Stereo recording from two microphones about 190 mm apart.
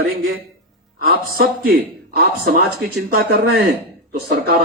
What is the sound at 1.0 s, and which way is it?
A woman's voice, 55° right (ahead or behind).